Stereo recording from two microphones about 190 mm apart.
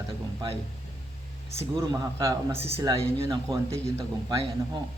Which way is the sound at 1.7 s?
20° right (ahead or behind).